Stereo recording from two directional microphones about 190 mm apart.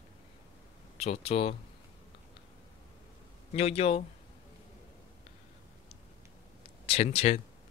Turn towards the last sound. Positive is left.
turn(degrees=35)  # may be behind; listen again after turning